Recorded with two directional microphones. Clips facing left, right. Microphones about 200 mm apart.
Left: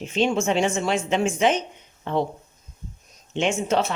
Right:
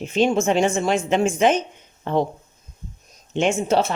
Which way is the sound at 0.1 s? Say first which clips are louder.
Right 3 dB; 45° right (ahead or behind).